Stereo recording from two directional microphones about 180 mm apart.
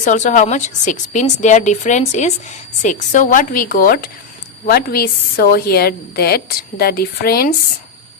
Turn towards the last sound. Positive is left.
turn(degrees=55)  # may be behind; listen again after turning